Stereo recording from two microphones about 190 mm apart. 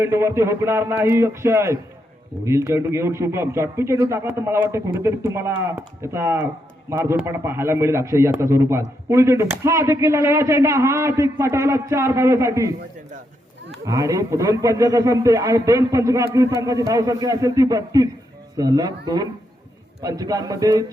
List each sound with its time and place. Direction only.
0.0 s a man's voice: 15° right (ahead or behind)
13.8 s a man's voice: 15° right (ahead or behind)